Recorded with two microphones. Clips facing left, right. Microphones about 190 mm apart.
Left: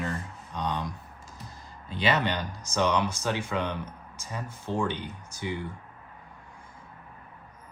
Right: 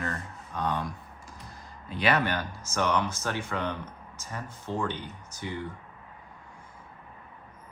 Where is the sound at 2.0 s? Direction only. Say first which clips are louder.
Even; 20° left (ahead or behind).